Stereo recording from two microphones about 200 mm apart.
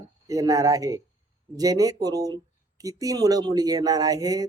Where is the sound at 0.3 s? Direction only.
15° right (ahead or behind).